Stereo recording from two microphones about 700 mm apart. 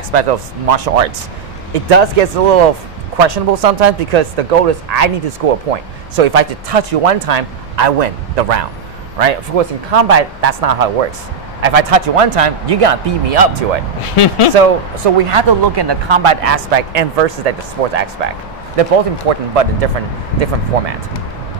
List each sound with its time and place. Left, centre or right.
0.1 s speech: right
7.2 s speech: right
9.2 s speech: right
14.0 s speech: left
15.1 s speech: right